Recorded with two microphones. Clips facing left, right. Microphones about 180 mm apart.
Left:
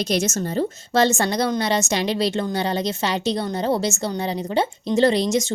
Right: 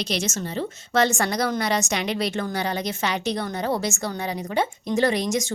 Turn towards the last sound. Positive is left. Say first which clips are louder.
# left 4 dB
turn(degrees=30)  # may be behind; listen again after turning